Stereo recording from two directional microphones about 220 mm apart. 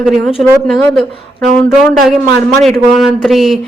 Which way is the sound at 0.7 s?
5° left (ahead or behind).